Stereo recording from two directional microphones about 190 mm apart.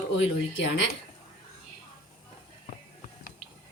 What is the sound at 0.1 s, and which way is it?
Speech, 75° left (ahead or behind).